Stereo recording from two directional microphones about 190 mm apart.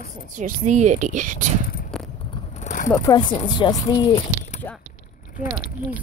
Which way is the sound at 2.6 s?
40° left (ahead or behind).